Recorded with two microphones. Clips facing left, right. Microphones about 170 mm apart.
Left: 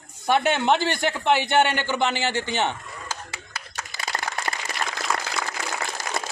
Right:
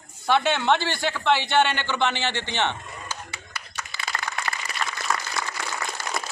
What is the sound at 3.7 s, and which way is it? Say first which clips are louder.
Typing: left 1 dB; 40° left (ahead or behind).